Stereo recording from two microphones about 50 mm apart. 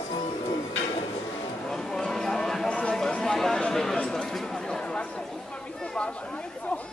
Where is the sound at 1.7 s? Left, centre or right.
Centre.